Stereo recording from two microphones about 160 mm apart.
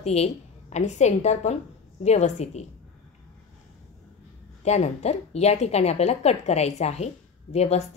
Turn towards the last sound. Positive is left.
turn(degrees=40)  # may be behind; listen again after turning